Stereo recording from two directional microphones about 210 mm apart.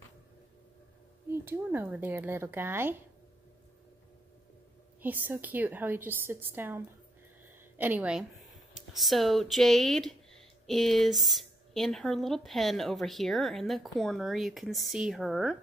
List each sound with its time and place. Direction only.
1.4 s a woman's voice: 10° right (ahead or behind)
5.0 s a woman's voice: 10° right (ahead or behind)